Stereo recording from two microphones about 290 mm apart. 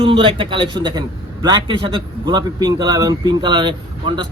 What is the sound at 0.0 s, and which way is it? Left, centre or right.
A man's voice, centre.